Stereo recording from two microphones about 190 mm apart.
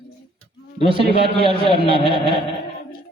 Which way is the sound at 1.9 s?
30° right (ahead or behind).